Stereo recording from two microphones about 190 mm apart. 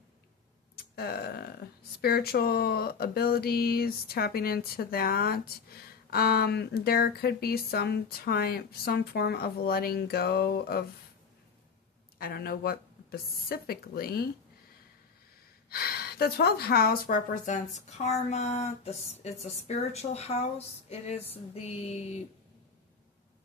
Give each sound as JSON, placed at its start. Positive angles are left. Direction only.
{"t": 0.9, "sound": "speech", "side_deg": 55}
{"t": 12.2, "sound": "speech", "side_deg": 50}
{"t": 15.7, "sound": "speech", "side_deg": 55}